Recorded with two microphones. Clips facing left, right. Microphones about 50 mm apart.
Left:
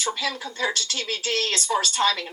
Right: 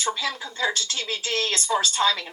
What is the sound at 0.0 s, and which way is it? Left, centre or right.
A man's voice, right.